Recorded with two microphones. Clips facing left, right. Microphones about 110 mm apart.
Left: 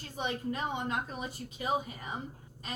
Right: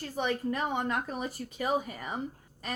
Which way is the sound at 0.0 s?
55° right (ahead or behind).